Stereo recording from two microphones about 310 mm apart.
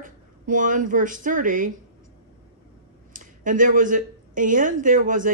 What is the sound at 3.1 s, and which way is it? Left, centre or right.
Speech, right.